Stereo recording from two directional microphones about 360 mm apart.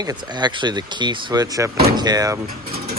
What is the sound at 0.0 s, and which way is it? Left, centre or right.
Speech, centre.